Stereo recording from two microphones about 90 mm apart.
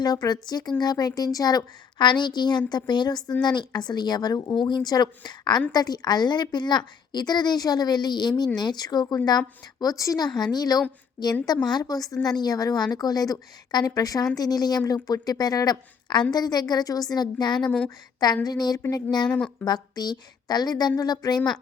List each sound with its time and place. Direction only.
0.0 s speech: 50° left (ahead or behind)
4.5 s speech: 60° left (ahead or behind)
19.3 s speech: 20° left (ahead or behind)
19.6 s speech: 50° left (ahead or behind)